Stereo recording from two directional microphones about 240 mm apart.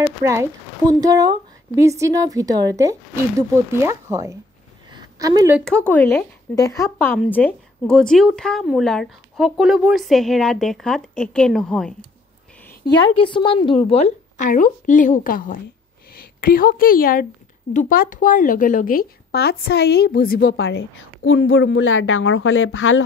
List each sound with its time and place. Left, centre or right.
0.2 s speech: centre
4.9 s a sound: centre
5.6 s speech: centre
12.8 s a woman's voice: left
13.3 s a woman's voice: centre; by 23.0 s left